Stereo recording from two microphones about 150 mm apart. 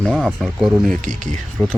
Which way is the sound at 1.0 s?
60° right (ahead or behind).